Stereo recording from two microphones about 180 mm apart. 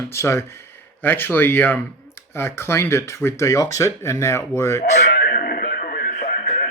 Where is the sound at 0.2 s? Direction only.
15° left (ahead or behind).